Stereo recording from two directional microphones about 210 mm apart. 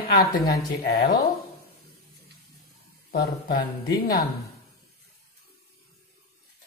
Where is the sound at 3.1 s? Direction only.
45° left (ahead or behind).